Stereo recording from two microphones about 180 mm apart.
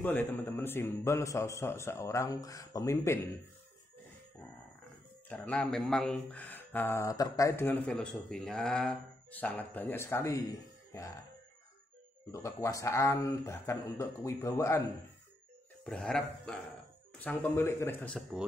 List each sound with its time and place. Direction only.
0.0 s speech: 10° left (ahead or behind)
5.3 s speech: 10° left (ahead or behind)
10.9 s music: 20° left (ahead or behind)
12.3 s speech: 15° left (ahead or behind)
15.8 s speech: 5° left (ahead or behind)